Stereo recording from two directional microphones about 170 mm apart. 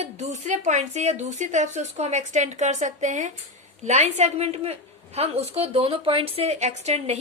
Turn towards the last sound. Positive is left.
turn(degrees=-40)  # may be behind; listen again after turning